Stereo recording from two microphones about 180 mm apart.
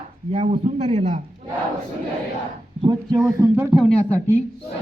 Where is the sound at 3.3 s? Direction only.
15° right (ahead or behind).